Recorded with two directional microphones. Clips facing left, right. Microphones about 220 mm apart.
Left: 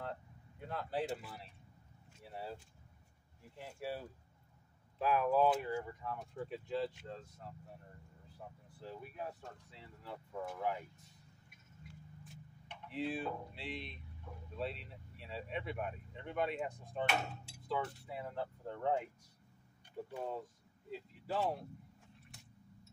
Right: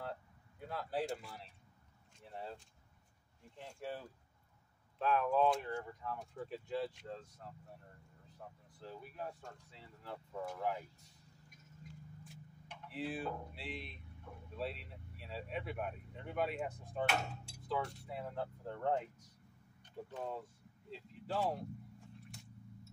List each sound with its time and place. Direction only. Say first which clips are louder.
0.0 s a sound: left 1 dB; 5° right (ahead or behind)
2.2 s speech: left 1 dB; 5° left (ahead or behind)
11.8 s a sound: right 2 dB; 40° right (ahead or behind)
12.8 s speech: left 2 dB; centre (ahead or behind)
20.1 s speech: left 1 dB; 10° left (ahead or behind)
21.3 s speech: left 1 dB; centre (ahead or behind)